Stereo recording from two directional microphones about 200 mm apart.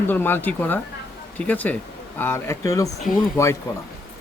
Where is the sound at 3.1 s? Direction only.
45° left (ahead or behind).